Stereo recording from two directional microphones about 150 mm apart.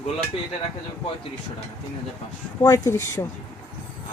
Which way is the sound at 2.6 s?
25° left (ahead or behind).